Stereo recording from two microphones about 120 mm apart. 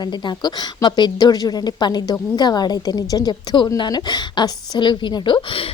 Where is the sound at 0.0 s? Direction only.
40° left (ahead or behind).